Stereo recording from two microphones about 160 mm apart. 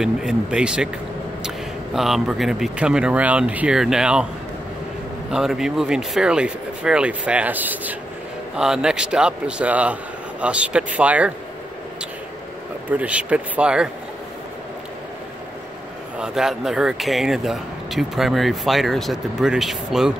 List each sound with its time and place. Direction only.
0.0 s speech: 5° right (ahead or behind)
2.0 s speech: centre (ahead or behind)
5.3 s speech: 5° right (ahead or behind)
12.9 s speech: 10° right (ahead or behind)
16.2 s speech: centre (ahead or behind)